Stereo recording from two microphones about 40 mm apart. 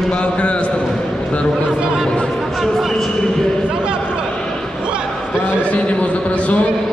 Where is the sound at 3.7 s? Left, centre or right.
Right.